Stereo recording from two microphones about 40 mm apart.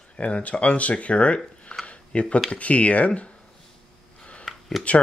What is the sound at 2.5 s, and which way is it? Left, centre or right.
Speech, left.